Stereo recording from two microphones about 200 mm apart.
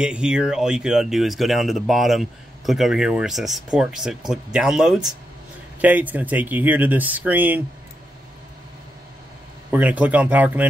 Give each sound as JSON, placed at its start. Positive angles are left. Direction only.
{"t": 0.0, "sound": "speech", "side_deg": -5}
{"t": 9.7, "sound": "speech", "side_deg": -5}